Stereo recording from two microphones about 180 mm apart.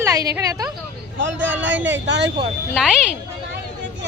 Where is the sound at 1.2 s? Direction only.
90° right.